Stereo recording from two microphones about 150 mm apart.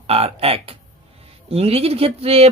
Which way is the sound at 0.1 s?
40° right (ahead or behind).